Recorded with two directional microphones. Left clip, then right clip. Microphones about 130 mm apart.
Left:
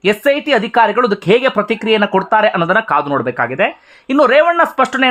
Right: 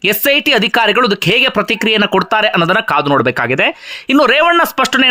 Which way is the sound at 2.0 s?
30° right (ahead or behind).